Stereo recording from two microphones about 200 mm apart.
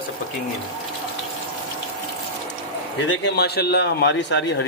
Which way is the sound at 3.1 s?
60° left (ahead or behind).